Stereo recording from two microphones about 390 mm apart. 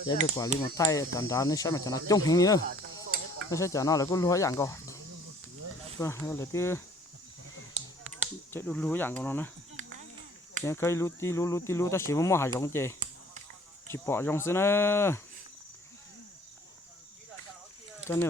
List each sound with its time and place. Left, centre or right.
0.1 s speech: centre
2.6 s a sound: right
3.5 s speech: centre
6.0 s speech: centre
7.7 s finger snapping: centre
8.5 s speech: centre
9.8 s a sound: centre
10.6 s speech: centre
18.1 s speech: centre